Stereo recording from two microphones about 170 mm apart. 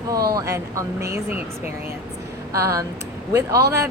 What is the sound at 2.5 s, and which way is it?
Speech, 15° right (ahead or behind).